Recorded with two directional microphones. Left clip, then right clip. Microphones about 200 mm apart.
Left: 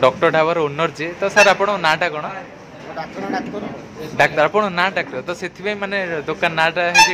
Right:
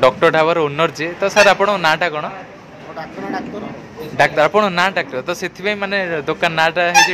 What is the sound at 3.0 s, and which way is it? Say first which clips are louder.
Speech: left 1 dB; 5° left (ahead or behind).